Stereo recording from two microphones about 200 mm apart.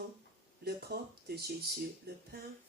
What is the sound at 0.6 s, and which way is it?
Speech, 55° right (ahead or behind).